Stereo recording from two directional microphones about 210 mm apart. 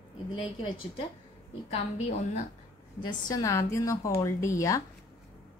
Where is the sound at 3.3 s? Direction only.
15° left (ahead or behind).